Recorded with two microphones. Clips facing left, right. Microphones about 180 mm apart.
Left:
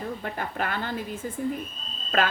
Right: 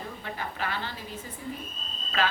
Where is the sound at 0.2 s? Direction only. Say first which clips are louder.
Left 4 dB; 50° left (ahead or behind).